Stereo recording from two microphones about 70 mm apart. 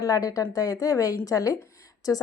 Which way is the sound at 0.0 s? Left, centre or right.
Left.